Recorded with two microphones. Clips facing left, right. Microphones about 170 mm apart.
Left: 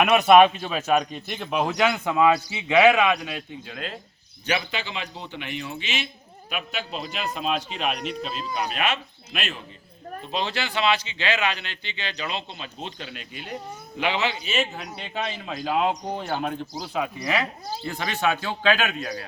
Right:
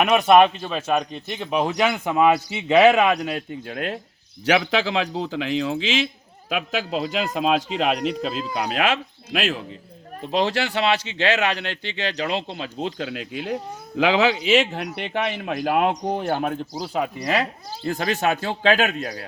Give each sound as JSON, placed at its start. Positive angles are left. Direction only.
{"t": 0.0, "sound": "speech", "side_deg": 5}
{"t": 1.6, "sound": "speech", "side_deg": -10}
{"t": 2.6, "sound": "speech", "side_deg": -30}
{"t": 3.6, "sound": "speech", "side_deg": -60}
{"t": 4.4, "sound": "speech", "side_deg": -90}
{"t": 10.3, "sound": "speech", "side_deg": -75}
{"t": 16.7, "sound": "speech", "side_deg": -35}